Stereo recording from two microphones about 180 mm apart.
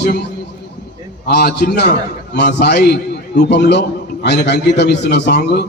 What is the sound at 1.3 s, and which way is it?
A man's voice, 65° left (ahead or behind).